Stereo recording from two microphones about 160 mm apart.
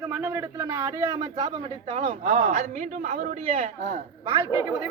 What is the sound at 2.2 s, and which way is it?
A man's voice, 50° right (ahead or behind).